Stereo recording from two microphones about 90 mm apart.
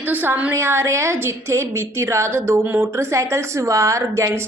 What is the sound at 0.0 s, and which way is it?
Speech, 20° right (ahead or behind).